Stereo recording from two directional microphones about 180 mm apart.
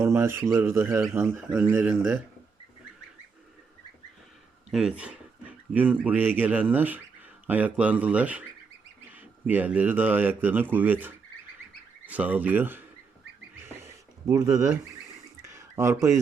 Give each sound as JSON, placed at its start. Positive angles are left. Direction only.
{"t": 0.0, "sound": "speech", "side_deg": -15}
{"t": 4.7, "sound": "speech", "side_deg": -5}
{"t": 13.6, "sound": "a sound", "side_deg": -15}